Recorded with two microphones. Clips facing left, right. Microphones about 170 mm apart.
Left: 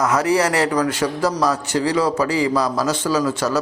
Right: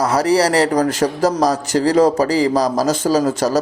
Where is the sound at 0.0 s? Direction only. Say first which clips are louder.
Right 3 dB; 35° right (ahead or behind).